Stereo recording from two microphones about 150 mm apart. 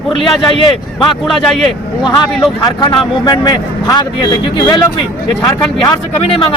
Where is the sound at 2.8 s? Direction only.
30° left (ahead or behind).